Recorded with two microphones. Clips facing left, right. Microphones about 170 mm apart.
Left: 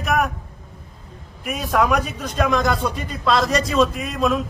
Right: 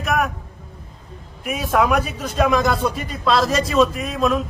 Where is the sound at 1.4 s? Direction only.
Centre (ahead or behind).